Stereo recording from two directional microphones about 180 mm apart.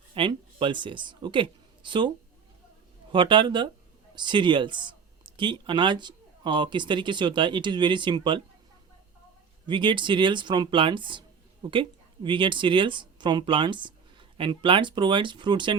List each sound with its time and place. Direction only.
0.1 s a woman's voice: 30° right (ahead or behind)
9.6 s speech: 25° right (ahead or behind)